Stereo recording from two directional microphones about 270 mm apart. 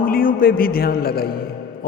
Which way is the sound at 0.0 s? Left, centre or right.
Left.